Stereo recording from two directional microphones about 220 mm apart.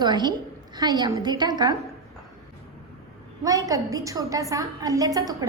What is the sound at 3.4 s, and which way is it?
A woman's voice, 15° right (ahead or behind).